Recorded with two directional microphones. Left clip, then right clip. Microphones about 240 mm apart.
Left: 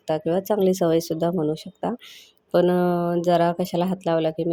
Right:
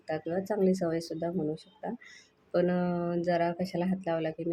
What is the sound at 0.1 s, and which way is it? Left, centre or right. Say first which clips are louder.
Speech: left 10 dB; left.